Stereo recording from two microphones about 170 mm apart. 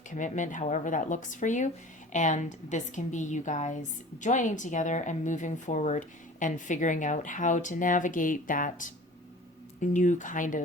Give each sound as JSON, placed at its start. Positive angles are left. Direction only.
{"t": 0.1, "sound": "a woman's voice", "side_deg": 50}